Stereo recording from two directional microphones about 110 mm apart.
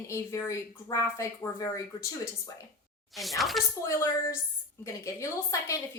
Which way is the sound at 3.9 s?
25° left (ahead or behind).